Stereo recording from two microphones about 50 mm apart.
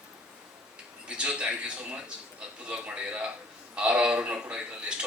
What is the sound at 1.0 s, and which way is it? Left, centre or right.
A man's voice, centre.